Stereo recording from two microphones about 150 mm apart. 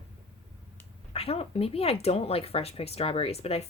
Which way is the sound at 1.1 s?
40° left (ahead or behind).